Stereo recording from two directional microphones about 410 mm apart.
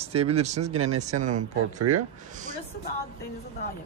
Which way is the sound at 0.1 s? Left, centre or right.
Centre.